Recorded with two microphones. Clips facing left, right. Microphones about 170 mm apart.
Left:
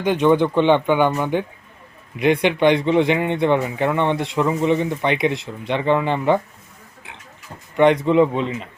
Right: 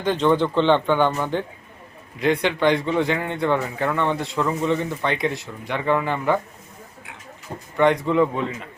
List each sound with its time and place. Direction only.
0.0 s a man's voice: 15° left (ahead or behind)
7.8 s a man's voice: 20° left (ahead or behind)